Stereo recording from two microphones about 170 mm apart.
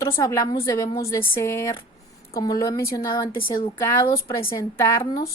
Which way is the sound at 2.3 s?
20° left (ahead or behind).